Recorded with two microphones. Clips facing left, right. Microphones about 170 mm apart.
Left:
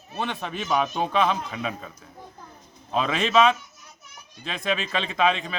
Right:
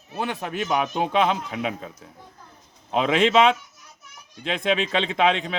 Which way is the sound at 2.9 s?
20° right (ahead or behind).